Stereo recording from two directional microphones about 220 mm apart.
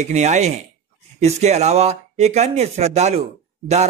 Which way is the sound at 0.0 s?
30° right (ahead or behind).